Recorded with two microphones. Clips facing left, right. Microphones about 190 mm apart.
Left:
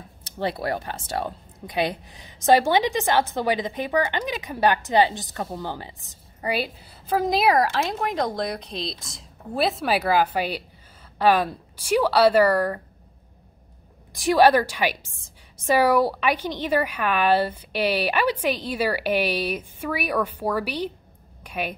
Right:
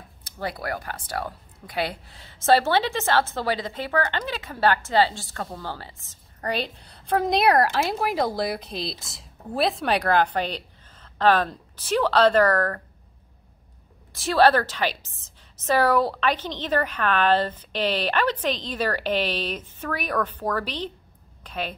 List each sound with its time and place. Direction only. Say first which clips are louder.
0.2 s speech: left 4 dB; 25° left (ahead or behind)
14.1 s speech: left 2 dB; 15° left (ahead or behind)
21.4 s a sound: left 2 dB; 10° left (ahead or behind)